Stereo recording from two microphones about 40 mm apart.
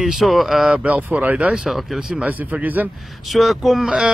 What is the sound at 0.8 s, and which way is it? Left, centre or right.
Speech, right.